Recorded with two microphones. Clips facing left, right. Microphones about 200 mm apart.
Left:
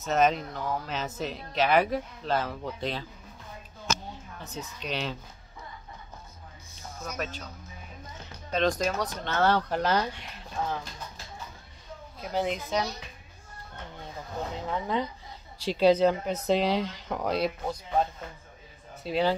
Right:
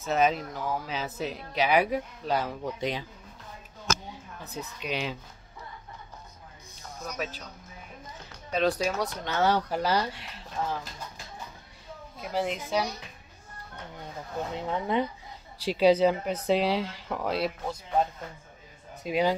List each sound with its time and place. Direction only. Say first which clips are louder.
0.1 s speech: left 1 dB; 5° right (ahead or behind)
4.1 s a woman's voice: even; 10° right (ahead or behind)
8.5 s speech: even; 5° right (ahead or behind)
12.2 s speech: left 1 dB; centre (ahead or behind)
14.5 s speech: right 2 dB; 20° right (ahead or behind); by 18.0 s centre (ahead or behind)
19.0 s speech: even; 10° right (ahead or behind)